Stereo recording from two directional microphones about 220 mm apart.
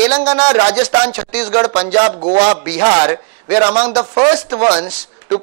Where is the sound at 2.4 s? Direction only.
10° right (ahead or behind).